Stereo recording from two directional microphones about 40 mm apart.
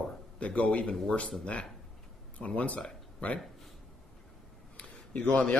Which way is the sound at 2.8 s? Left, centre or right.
Left.